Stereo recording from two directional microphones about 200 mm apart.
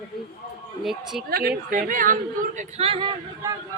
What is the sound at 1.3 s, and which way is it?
Speech, 50° right (ahead or behind).